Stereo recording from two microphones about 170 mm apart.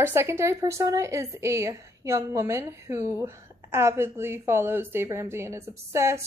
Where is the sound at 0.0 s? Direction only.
15° right (ahead or behind).